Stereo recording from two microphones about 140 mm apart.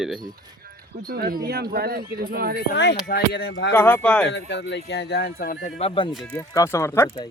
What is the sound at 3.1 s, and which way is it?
Speech, 90° left.